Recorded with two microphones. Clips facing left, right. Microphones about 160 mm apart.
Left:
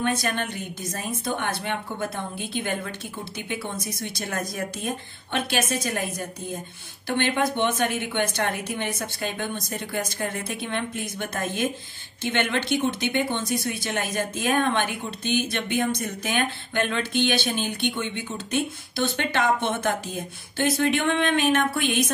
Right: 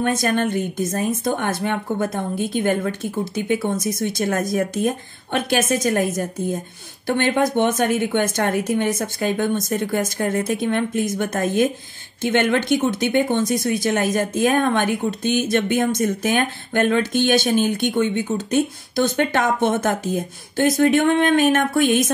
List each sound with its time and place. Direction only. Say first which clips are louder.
0.0 s speech: right 6 dB; 45° right (ahead or behind)